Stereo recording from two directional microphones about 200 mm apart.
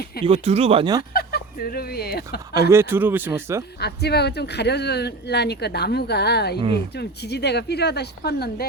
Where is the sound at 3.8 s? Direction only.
55° left (ahead or behind).